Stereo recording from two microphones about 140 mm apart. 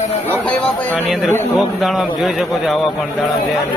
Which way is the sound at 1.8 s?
Centre (ahead or behind).